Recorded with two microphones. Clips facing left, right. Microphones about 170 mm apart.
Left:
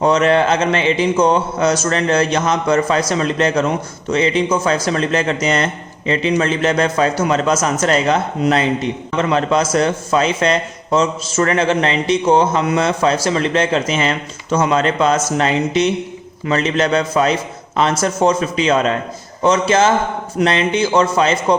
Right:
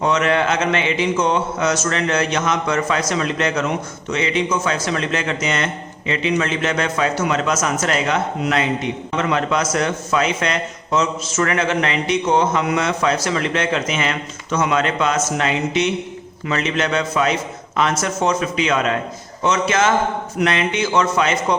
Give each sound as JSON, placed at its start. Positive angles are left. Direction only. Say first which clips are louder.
{"t": 0.0, "sound": "a man's voice", "louder": "left 4 dB", "side_deg": 35}